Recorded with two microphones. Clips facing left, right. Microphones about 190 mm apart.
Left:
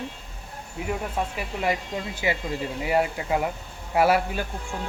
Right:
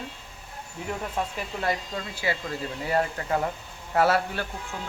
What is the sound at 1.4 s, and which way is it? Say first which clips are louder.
A woman's voice: left 2 dB; 15° left (ahead or behind).